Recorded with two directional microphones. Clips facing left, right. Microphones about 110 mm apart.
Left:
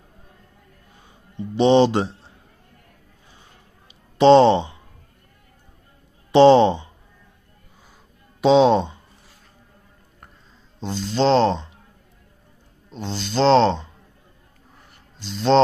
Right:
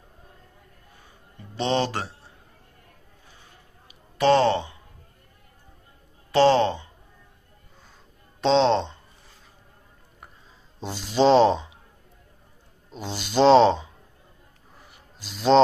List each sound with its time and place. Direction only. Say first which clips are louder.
1.5 s speech: left 9 dB; 20° left (ahead or behind)
4.2 s speech: left 7 dB; 20° left (ahead or behind)
6.3 s speech: left 6 dB; 20° left (ahead or behind)
8.4 s speech: left 5 dB; 10° left (ahead or behind)
10.8 s speech: even; 10° right (ahead or behind)
12.9 s speech: even; 10° right (ahead or behind)
14.8 s a sound: left 5 dB; 5° right (ahead or behind)